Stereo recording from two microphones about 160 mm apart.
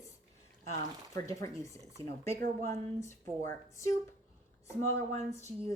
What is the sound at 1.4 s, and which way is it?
Speech, 20° left (ahead or behind).